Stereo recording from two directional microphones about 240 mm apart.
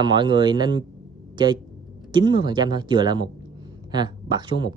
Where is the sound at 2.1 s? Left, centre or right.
Centre.